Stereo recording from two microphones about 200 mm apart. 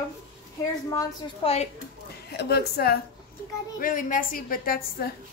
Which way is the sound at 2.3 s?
55° left (ahead or behind).